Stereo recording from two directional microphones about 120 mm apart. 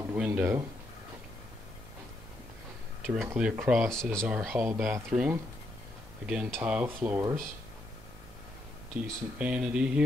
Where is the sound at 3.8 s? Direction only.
5° left (ahead or behind).